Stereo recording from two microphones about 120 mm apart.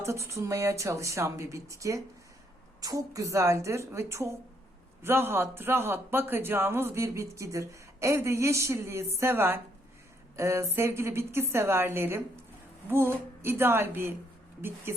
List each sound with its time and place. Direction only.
0.0 s speech: 25° right (ahead or behind)